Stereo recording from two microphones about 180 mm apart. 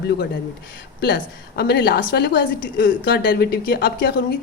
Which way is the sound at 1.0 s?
65° left (ahead or behind).